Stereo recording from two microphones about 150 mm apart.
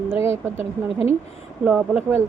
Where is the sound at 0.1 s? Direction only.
15° right (ahead or behind).